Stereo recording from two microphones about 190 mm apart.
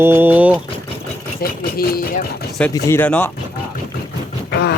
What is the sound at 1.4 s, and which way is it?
Speech, 50° left (ahead or behind).